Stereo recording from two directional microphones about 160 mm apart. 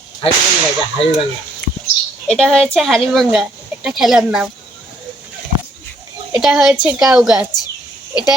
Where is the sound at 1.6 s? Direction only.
5° left (ahead or behind).